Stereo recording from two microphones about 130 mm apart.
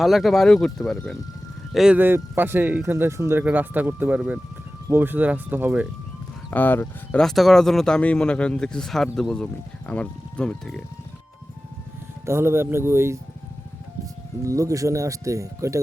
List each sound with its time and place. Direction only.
0.0 s speech: centre (ahead or behind)
2.0 s speech: 15° right (ahead or behind)
6.5 s speech: 15° left (ahead or behind)
7.2 s speech: centre (ahead or behind)
12.2 s speech: 20° right (ahead or behind)